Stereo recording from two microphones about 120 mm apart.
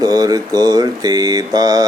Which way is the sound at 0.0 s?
30° right (ahead or behind).